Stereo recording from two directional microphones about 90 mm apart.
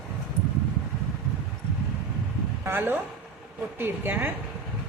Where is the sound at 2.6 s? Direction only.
25° right (ahead or behind).